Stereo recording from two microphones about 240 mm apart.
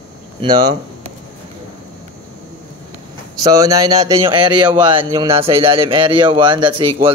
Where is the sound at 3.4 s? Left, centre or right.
Centre.